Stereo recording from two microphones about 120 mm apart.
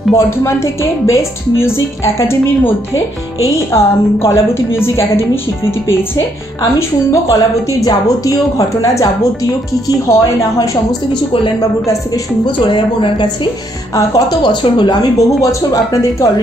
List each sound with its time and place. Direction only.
0.1 s a woman's voice: 25° left (ahead or behind)
6.6 s a woman's voice: 25° left (ahead or behind)
12.4 s speech: 45° left (ahead or behind)
13.9 s speech: 30° left (ahead or behind)